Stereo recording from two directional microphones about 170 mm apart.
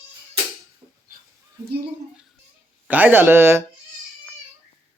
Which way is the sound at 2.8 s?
10° right (ahead or behind).